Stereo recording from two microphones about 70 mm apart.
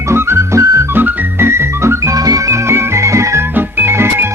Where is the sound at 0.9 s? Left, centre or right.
Right.